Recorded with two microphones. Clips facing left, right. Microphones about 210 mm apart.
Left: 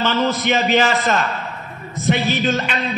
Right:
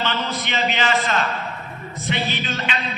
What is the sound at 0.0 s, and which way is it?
Speech, 45° left (ahead or behind).